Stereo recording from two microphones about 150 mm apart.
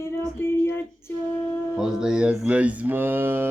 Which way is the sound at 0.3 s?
15° left (ahead or behind).